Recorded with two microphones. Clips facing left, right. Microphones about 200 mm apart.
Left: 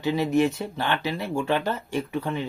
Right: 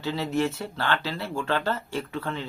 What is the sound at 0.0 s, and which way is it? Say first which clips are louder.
Speech: left 5 dB; 15° left (ahead or behind).